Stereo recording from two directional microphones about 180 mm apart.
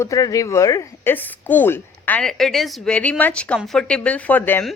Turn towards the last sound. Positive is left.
turn(degrees=10)  # may be behind; listen again after turning